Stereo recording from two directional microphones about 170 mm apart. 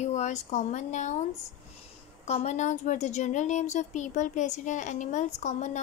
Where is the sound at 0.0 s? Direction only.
45° left (ahead or behind).